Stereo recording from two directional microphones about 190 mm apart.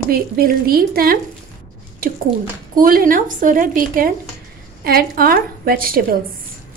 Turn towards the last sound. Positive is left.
turn(degrees=-50)  # may be behind; listen again after turning